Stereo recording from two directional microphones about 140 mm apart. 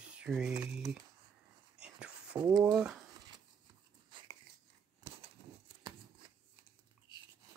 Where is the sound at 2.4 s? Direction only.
30° right (ahead or behind).